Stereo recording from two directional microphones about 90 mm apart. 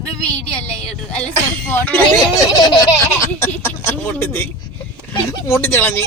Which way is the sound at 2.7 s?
45° left (ahead or behind).